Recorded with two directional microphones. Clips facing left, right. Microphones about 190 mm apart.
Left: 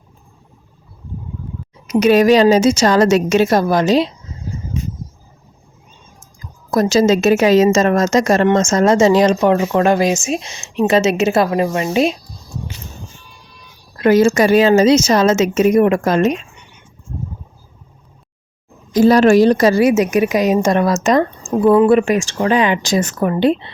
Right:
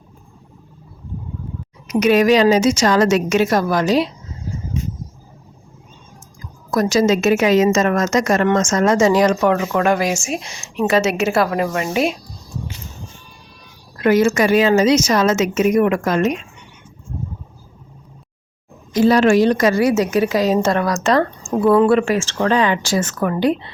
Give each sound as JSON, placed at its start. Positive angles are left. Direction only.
{"t": 1.9, "sound": "a woman's voice", "side_deg": 30}
{"t": 6.7, "sound": "a woman's voice", "side_deg": 25}
{"t": 14.0, "sound": "a woman's voice", "side_deg": 30}
{"t": 18.9, "sound": "a woman's voice", "side_deg": 40}
{"t": 19.9, "sound": "a woman's voice", "side_deg": 20}